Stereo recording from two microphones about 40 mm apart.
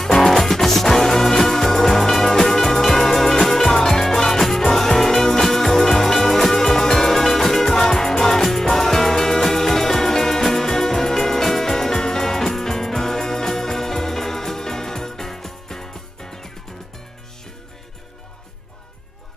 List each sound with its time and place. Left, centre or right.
0.0 s music: centre
0.3 s music: centre